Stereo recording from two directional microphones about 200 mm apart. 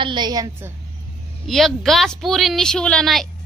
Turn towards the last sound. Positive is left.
turn(degrees=0)  # may be behind; listen again after turning